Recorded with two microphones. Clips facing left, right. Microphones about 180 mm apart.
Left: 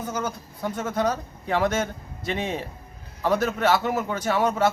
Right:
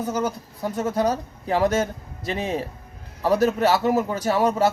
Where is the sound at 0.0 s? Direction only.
35° right (ahead or behind).